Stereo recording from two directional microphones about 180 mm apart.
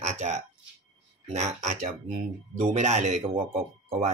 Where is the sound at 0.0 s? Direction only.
40° right (ahead or behind).